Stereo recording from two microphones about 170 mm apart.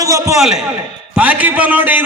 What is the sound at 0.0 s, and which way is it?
Speech, 20° right (ahead or behind).